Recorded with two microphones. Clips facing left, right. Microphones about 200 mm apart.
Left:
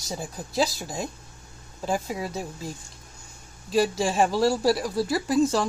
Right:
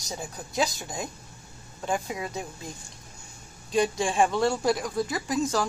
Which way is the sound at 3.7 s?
5° left (ahead or behind).